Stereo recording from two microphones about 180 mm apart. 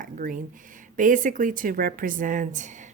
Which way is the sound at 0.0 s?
50° right (ahead or behind).